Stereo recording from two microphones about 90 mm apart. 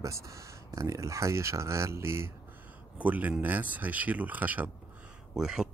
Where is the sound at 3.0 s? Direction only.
15° right (ahead or behind).